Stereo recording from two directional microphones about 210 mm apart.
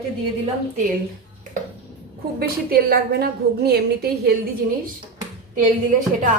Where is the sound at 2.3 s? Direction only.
45° right (ahead or behind).